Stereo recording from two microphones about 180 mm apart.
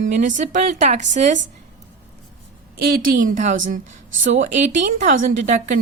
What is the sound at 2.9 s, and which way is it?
A woman's voice, 55° right (ahead or behind).